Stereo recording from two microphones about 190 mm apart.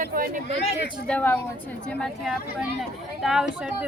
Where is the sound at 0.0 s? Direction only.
45° right (ahead or behind).